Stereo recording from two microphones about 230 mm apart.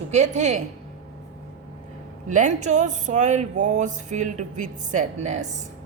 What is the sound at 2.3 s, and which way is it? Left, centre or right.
Music, right.